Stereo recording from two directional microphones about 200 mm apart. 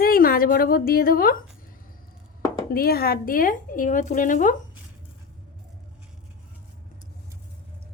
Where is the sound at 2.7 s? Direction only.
50° left (ahead or behind).